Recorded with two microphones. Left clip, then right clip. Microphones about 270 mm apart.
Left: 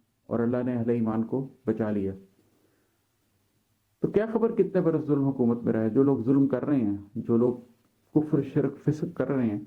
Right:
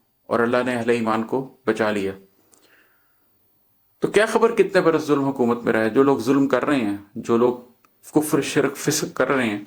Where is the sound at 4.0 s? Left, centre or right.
Centre.